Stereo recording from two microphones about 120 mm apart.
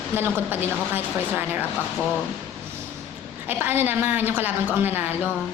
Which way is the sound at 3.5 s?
15° right (ahead or behind).